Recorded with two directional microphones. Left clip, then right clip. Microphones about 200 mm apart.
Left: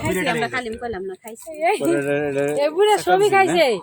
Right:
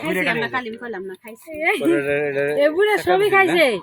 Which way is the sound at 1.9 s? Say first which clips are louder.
Right 1 dB; 45° left (ahead or behind).